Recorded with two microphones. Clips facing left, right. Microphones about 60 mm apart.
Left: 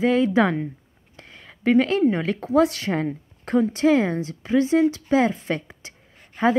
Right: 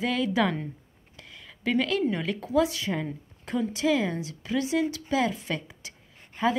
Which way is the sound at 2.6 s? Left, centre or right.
Left.